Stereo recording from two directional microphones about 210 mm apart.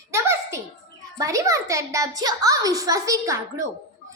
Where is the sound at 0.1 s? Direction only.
15° right (ahead or behind).